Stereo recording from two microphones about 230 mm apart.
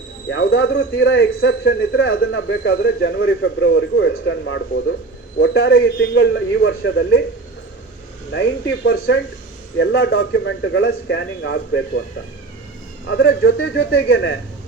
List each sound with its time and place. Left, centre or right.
0.3 s speech: left
8.3 s speech: left
13.1 s speech: left